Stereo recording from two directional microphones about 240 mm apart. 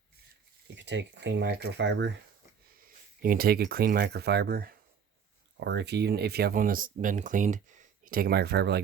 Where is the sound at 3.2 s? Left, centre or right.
Right.